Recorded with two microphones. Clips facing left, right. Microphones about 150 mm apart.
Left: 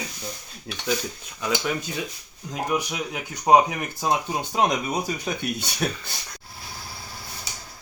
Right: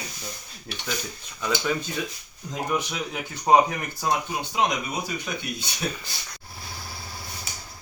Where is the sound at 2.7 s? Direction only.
10° left (ahead or behind).